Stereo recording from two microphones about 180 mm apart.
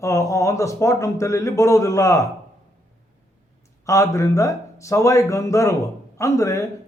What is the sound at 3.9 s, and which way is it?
Speech, 15° left (ahead or behind).